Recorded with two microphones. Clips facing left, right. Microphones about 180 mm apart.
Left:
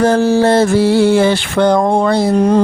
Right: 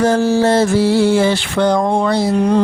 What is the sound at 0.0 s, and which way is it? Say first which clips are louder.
Mantra: left 2 dB; 60° left (ahead or behind).